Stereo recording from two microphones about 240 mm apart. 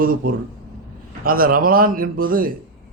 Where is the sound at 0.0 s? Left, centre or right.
Right.